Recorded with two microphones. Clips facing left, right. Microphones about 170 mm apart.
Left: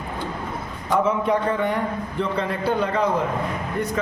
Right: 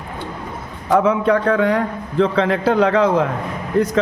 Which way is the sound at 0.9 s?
90° right.